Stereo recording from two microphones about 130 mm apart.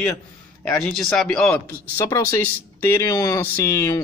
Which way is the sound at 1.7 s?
25° left (ahead or behind).